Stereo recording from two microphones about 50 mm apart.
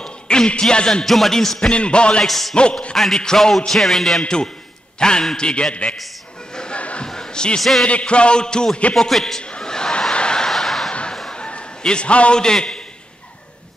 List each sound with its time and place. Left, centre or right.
0.0 s a man's voice: centre
1.0 s speech: centre
1.7 s music: left
2.2 s speech: centre
2.5 s music: centre
3.3 s speech: centre
4.2 s a man's voice: centre
6.5 s a sound: centre
7.8 s music: left
8.9 s a man's voice: centre
9.4 s chuckle: centre
10.9 s slam: left
11.3 s a sound: left
11.8 s music: centre